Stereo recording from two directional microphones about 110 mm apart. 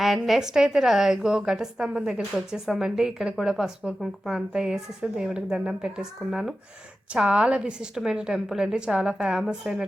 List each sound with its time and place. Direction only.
0.0 s a woman's voice: centre (ahead or behind)